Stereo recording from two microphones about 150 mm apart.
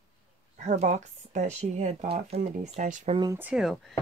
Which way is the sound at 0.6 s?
50° right (ahead or behind).